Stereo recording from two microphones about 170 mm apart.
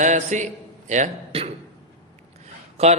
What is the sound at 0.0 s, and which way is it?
A man's voice, 45° right (ahead or behind).